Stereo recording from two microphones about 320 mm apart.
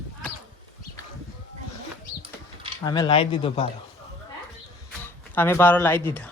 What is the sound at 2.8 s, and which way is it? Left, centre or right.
Speech, centre.